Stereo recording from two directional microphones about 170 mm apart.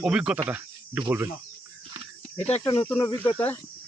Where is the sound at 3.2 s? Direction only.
10° left (ahead or behind).